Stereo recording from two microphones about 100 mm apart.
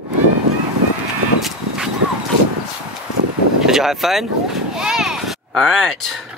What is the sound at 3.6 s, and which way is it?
Speech, 5° right (ahead or behind).